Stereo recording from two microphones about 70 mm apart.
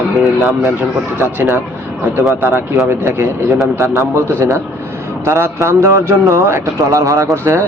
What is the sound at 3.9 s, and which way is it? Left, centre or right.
A man's voice, right.